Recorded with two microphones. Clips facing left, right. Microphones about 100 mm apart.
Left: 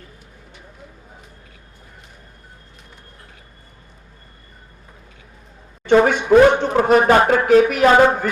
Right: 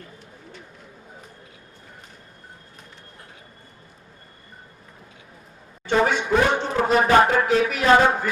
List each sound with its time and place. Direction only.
5.8 s speech: 55° left (ahead or behind)